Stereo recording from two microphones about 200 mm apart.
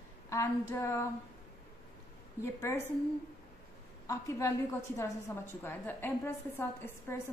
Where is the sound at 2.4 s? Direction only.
15° left (ahead or behind).